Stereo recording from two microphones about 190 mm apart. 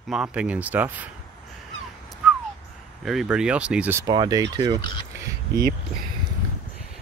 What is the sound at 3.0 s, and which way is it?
Speech, centre (ahead or behind).